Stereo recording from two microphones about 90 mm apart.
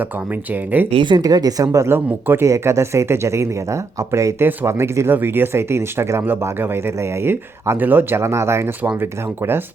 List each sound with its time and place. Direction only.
0.5 s speech: 20° right (ahead or behind)
0.9 s speech: 70° right (ahead or behind)
1.2 s speech: 45° right (ahead or behind)
2.0 s speech: 25° right (ahead or behind)